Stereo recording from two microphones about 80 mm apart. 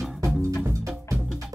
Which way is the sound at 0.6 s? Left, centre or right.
Right.